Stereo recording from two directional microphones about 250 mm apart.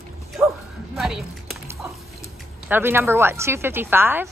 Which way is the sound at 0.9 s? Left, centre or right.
Centre.